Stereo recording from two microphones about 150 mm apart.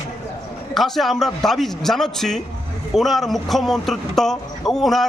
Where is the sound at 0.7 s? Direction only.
Centre (ahead or behind).